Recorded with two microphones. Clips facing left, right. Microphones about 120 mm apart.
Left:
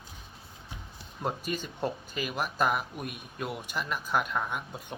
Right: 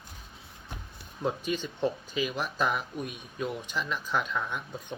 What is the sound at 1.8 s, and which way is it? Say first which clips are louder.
Speech: right 4 dB; 50° left (ahead or behind).